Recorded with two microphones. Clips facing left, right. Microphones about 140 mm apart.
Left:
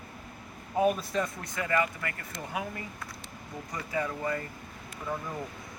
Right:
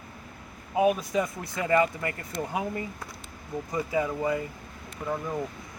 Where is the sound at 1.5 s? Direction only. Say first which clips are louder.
Right 6 dB; 25° right (ahead or behind).